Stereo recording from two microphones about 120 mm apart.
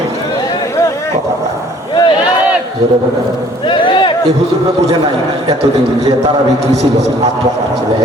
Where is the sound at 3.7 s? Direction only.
45° left (ahead or behind).